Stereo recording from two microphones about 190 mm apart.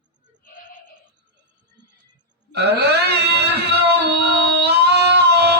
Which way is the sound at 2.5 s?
60° right (ahead or behind).